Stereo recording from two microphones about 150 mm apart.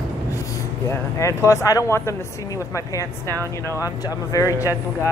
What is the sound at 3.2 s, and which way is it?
Speech, 20° right (ahead or behind).